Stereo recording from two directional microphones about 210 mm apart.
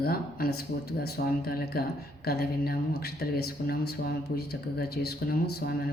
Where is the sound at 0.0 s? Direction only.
45° left (ahead or behind).